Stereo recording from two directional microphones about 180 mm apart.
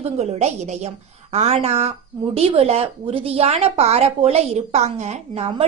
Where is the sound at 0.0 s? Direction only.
35° right (ahead or behind).